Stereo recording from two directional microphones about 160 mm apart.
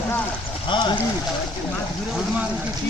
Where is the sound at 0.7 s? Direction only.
30° left (ahead or behind).